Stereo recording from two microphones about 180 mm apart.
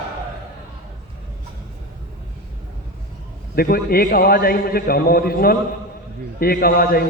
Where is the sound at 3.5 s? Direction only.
55° left (ahead or behind).